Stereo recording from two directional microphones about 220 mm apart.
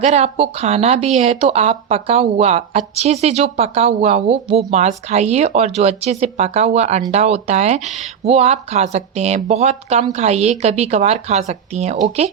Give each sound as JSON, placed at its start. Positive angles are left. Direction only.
{"t": 0.0, "sound": "speech", "side_deg": -30}